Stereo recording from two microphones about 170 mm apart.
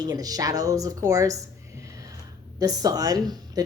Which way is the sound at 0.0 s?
20° right (ahead or behind).